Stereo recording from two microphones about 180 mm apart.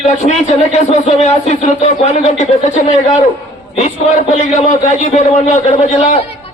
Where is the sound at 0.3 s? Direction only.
40° left (ahead or behind).